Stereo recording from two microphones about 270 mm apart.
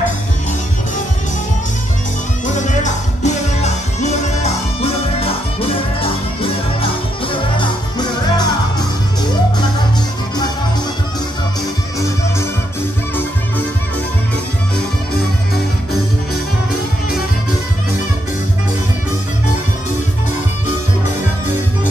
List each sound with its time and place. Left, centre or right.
2.4 s music: left